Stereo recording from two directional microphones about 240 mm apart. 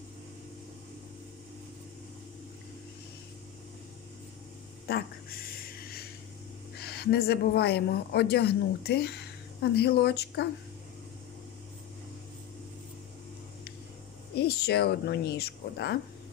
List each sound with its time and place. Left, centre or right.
4.8 s a sound: left
6.8 s a woman's voice: left
14.3 s speech: left